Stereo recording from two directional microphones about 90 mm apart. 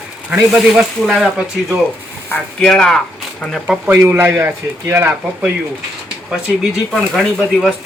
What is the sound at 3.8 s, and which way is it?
Speech, 25° right (ahead or behind).